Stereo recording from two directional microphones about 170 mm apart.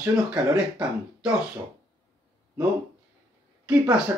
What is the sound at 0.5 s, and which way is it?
Speech, 5° right (ahead or behind).